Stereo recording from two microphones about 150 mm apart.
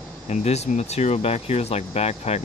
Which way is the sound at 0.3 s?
45° left (ahead or behind).